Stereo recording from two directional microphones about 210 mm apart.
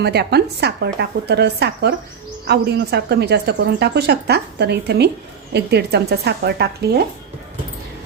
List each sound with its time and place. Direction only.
0.0 s speech: 50° right (ahead or behind)